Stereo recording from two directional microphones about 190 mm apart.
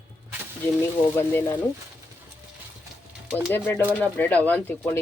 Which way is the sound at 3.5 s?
10° left (ahead or behind).